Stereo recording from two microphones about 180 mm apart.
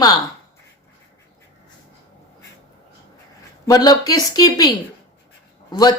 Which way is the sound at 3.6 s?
20° left (ahead or behind).